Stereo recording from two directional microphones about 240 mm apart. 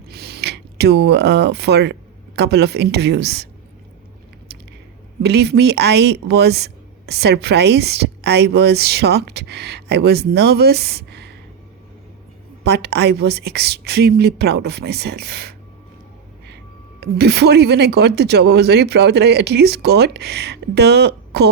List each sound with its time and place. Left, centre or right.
0.1 s speech: right
5.2 s speech: right
12.6 s speech: right
17.0 s speech: right